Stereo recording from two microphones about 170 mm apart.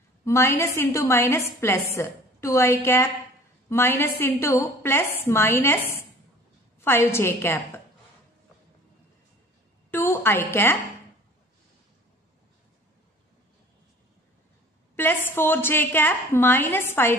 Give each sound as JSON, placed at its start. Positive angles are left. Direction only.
{"t": 0.2, "sound": "a woman's voice", "side_deg": 15}
{"t": 9.8, "sound": "a woman's voice", "side_deg": 15}
{"t": 15.0, "sound": "a woman's voice", "side_deg": 15}